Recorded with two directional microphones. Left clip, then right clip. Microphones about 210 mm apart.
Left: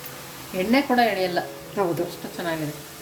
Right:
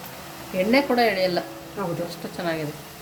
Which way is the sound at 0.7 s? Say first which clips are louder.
Even; 20° right (ahead or behind).